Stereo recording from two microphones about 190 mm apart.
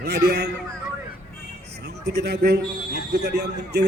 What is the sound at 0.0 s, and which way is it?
Speech, 60° right (ahead or behind).